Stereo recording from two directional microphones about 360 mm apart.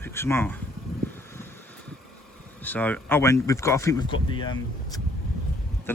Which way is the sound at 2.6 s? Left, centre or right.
Centre.